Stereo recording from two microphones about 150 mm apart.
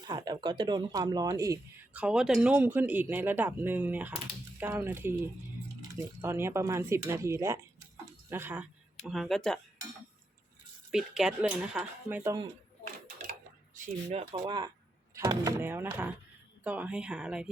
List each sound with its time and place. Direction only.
0.0 s speech: 25° right (ahead or behind)
1.9 s speech: 5° right (ahead or behind)
9.0 s speech: centre (ahead or behind)
10.9 s speech: 5° right (ahead or behind)
13.7 s speech: 50° right (ahead or behind)
14.3 s speech: 30° right (ahead or behind)
15.6 s speech: 15° right (ahead or behind)